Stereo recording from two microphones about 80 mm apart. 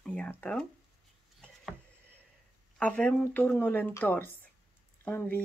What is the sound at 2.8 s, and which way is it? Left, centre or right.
A woman's voice, centre.